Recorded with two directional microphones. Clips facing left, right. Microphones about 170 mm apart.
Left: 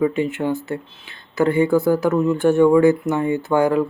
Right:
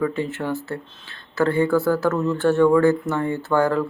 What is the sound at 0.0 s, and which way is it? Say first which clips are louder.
Speech: left 4 dB; 15° left (ahead or behind).